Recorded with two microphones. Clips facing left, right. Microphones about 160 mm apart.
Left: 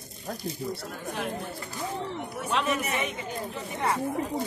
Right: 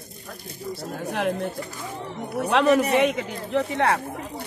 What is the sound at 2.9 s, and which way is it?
Speech, 85° right.